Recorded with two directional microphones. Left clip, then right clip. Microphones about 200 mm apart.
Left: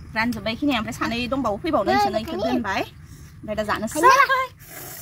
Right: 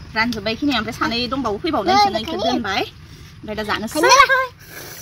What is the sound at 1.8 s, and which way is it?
Speech, 40° right (ahead or behind).